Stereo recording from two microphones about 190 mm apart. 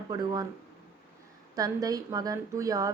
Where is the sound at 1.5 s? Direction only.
20° right (ahead or behind).